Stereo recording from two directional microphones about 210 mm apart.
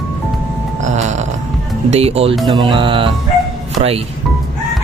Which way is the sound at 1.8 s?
30° right (ahead or behind).